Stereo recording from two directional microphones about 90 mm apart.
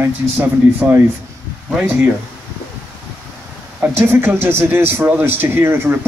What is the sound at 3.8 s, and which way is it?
Speech, 25° right (ahead or behind).